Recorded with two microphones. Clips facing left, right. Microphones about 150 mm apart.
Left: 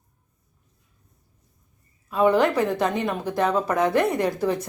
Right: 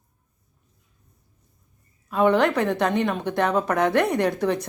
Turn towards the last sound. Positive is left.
turn(degrees=5)  # may be behind; listen again after turning